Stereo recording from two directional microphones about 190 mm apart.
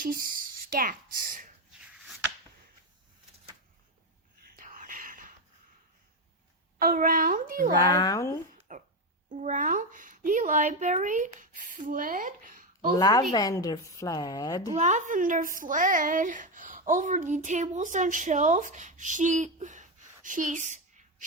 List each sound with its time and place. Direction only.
0.0 s speech: 50° right (ahead or behind)
4.5 s whispering: 45° right (ahead or behind)
6.7 s a child's voice: 50° right (ahead or behind)
7.8 s a woman's voice: 20° left (ahead or behind)
8.7 s music: 45° right (ahead or behind)
9.3 s speech: 40° right (ahead or behind)
13.0 s a woman's voice: 20° left (ahead or behind)
14.8 s a woman's voice: 40° right (ahead or behind)